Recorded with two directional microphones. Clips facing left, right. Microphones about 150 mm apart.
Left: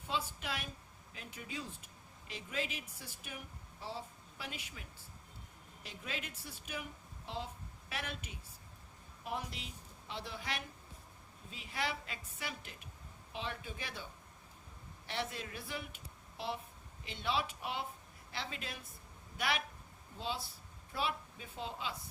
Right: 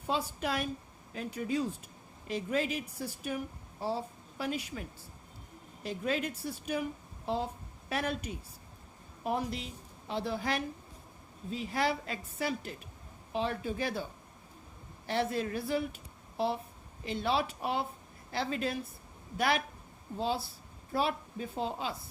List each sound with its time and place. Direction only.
0.1 s a woman's voice: 40° right (ahead or behind)
17.1 s a woman's voice: 40° right (ahead or behind)